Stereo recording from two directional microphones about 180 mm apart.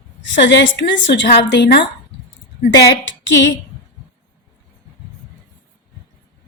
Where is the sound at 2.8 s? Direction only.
90° left.